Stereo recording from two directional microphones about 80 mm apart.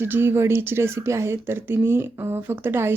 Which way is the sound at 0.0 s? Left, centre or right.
Right.